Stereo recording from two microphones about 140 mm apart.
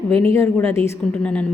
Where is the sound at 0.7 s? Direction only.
20° left (ahead or behind).